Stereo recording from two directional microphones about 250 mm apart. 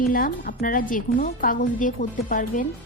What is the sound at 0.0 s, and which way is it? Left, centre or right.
A woman's voice, left.